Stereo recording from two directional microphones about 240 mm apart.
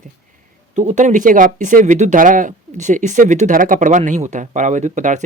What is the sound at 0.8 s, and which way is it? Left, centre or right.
Speech, right.